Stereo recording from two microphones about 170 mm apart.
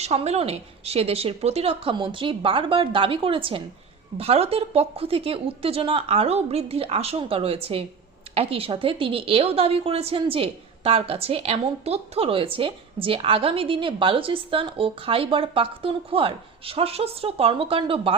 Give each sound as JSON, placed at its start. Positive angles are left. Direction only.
{"t": 0.0, "sound": "a woman's voice", "side_deg": -40}